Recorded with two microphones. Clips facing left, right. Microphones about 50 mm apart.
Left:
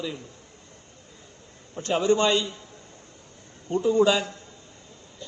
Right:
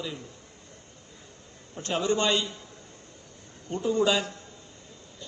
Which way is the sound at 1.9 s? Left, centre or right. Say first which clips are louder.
Left 4 dB; left.